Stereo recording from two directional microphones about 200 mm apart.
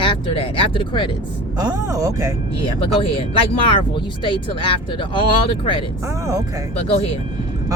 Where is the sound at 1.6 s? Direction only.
20° right (ahead or behind).